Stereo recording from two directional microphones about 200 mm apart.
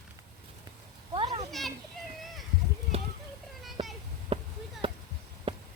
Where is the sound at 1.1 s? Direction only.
25° right (ahead or behind).